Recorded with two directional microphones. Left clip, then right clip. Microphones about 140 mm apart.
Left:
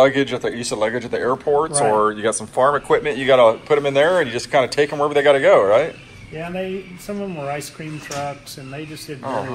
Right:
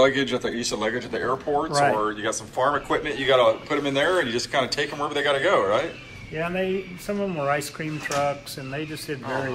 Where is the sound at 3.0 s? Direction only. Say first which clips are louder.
Left 5 dB; 5° right (ahead or behind).